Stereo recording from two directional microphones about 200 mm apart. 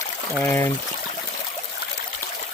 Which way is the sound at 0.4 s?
15° left (ahead or behind).